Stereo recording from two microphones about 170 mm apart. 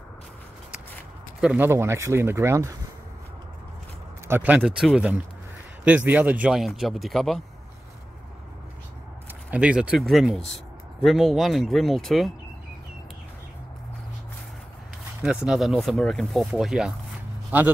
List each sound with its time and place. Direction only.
1.4 s speech: 10° right (ahead or behind)
4.3 s speech: 10° right (ahead or behind)
9.5 s speech: 5° right (ahead or behind)
15.2 s speech: 5° right (ahead or behind)